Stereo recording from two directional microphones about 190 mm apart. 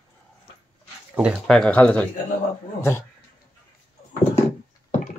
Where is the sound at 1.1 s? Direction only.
Centre (ahead or behind).